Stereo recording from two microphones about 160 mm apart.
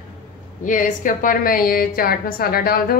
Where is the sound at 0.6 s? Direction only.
55° left (ahead or behind); by 2.9 s 70° left (ahead or behind).